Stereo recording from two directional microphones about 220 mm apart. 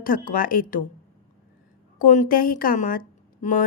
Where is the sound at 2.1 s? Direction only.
35° left (ahead or behind).